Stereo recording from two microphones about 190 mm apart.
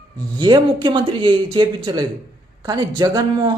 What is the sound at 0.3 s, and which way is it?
Speech, 25° right (ahead or behind).